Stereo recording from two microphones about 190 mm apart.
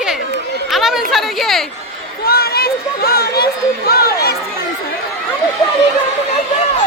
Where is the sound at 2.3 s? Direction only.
55° left (ahead or behind).